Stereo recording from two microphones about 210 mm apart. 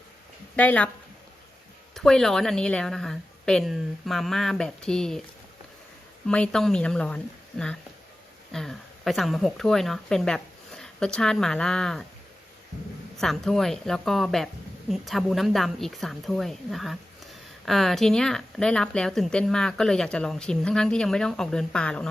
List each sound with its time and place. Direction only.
0.5 s speech: 5° left (ahead or behind)
2.0 s speech: centre (ahead or behind)
6.2 s speech: 5° left (ahead or behind)
8.5 s speech: centre (ahead or behind)
13.1 s speech: centre (ahead or behind)